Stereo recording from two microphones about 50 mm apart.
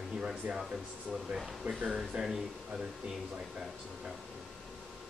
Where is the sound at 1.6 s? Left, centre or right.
Centre.